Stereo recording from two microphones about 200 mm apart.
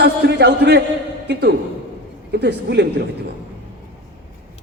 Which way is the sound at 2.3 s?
60° right (ahead or behind).